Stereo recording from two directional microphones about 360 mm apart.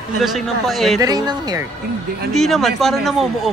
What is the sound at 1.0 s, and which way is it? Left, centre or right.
Speech, centre.